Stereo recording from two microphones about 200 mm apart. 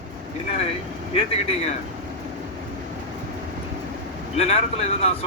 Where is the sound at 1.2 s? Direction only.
30° left (ahead or behind).